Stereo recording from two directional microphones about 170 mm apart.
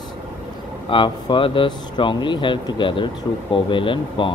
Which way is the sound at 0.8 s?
30° left (ahead or behind).